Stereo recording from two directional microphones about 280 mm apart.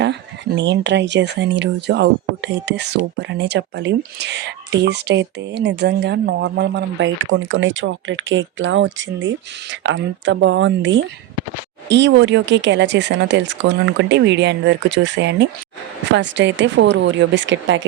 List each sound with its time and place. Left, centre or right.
0.0 s speech: right